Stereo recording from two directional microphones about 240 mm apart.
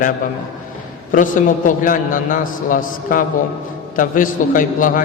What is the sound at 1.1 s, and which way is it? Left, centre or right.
A man's voice, left.